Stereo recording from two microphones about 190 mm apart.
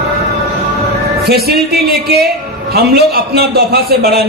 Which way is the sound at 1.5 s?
55° right (ahead or behind).